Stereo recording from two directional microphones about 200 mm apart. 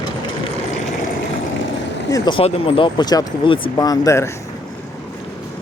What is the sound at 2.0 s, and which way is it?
Speech, 20° left (ahead or behind).